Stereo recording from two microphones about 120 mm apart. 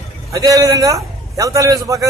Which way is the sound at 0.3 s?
30° right (ahead or behind).